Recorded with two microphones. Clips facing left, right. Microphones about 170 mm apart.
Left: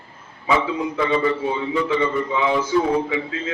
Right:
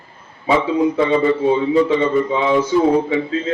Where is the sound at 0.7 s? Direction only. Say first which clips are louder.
Right 6 dB; 25° right (ahead or behind).